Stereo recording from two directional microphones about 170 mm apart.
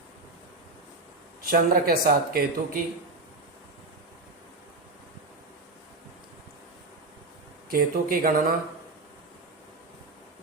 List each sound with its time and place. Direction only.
1.5 s speech: 55° right (ahead or behind)
7.7 s speech: 60° right (ahead or behind)